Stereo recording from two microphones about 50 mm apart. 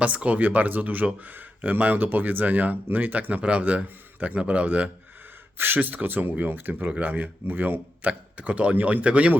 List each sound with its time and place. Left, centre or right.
0.0 s a man's voice: right
5.5 s a man's voice: right